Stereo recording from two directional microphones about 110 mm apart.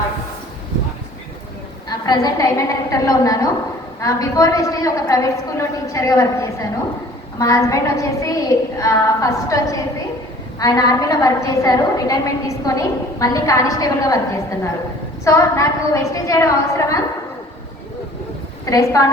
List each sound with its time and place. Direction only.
1.9 s a woman's voice: 35° left (ahead or behind)
15.2 s a woman's voice: 30° left (ahead or behind)
18.6 s a woman's voice: 30° left (ahead or behind)